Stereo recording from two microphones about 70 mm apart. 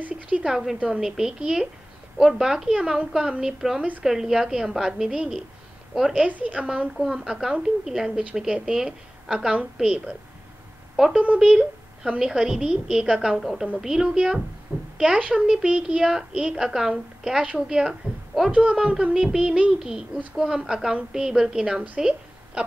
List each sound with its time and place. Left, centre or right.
0.3 s a woman's voice: centre
11.1 s a woman's voice: centre
18.5 s a woman's voice: centre